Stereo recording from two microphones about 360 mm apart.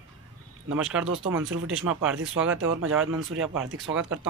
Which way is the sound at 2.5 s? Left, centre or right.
Right.